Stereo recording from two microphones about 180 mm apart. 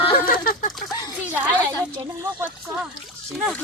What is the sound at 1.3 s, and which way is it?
Speech, 10° right (ahead or behind).